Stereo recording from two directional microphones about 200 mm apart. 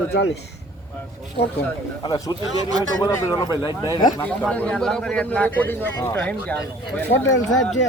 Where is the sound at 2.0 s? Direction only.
15° left (ahead or behind).